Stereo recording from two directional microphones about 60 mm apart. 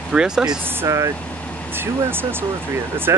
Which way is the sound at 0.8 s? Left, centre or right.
Right.